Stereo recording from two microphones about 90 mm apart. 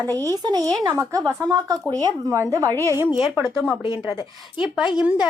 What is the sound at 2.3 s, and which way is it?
Speech, 30° right (ahead or behind).